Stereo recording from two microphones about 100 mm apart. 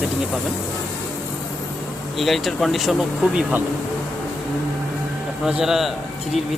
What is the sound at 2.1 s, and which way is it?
Speech, centre (ahead or behind).